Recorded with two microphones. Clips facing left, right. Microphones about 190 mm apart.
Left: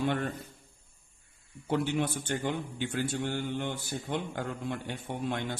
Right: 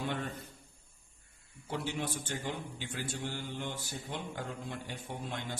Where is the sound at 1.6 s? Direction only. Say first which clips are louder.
Left 7 dB; 60° left (ahead or behind).